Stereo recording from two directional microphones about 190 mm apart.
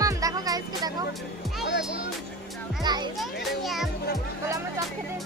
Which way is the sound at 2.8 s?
20° right (ahead or behind).